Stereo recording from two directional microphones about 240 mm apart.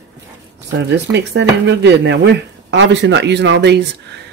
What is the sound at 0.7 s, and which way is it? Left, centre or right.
A man's voice, right.